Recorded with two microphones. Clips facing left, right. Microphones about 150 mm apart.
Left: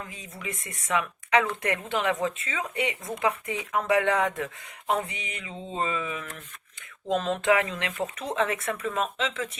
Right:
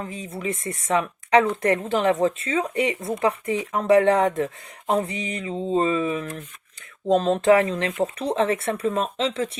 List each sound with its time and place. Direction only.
0.0 s speech: 35° right (ahead or behind)